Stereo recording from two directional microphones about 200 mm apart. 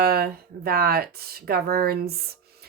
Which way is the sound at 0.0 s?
50° right (ahead or behind).